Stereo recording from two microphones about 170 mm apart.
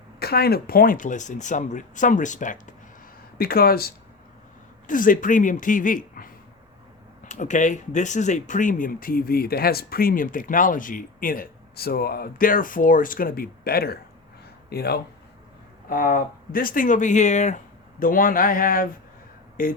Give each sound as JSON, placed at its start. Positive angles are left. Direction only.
{"t": 0.2, "sound": "speech", "side_deg": 65}
{"t": 3.3, "sound": "speech", "side_deg": 60}
{"t": 4.9, "sound": "speech", "side_deg": 50}
{"t": 15.9, "sound": "speech", "side_deg": 55}